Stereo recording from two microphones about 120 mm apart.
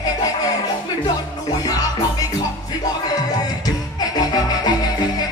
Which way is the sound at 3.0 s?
35° left (ahead or behind).